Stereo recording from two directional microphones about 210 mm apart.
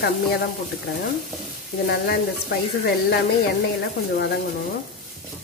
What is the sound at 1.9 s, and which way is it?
Speech, 50° left (ahead or behind).